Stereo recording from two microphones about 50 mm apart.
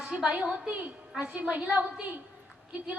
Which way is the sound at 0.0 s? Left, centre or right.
Centre.